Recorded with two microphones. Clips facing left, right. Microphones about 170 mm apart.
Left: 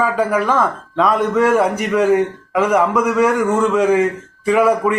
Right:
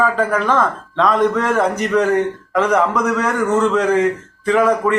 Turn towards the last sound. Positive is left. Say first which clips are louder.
# left 1 dB
turn(degrees=10)  # may be behind; listen again after turning